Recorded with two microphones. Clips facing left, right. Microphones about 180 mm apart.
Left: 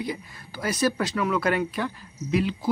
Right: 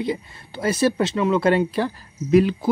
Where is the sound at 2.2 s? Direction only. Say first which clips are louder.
Right 7 dB; 50° right (ahead or behind).